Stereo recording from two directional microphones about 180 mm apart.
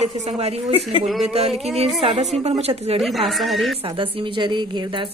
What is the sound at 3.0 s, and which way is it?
Speech, centre (ahead or behind).